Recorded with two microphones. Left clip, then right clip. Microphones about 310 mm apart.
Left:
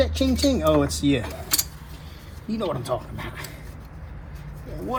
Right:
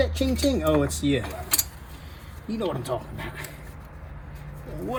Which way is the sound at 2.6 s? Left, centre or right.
Centre.